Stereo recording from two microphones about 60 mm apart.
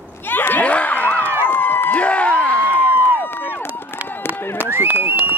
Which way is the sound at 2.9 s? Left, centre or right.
Right.